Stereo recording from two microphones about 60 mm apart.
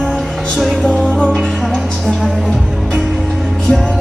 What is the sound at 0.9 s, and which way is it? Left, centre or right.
Music, centre.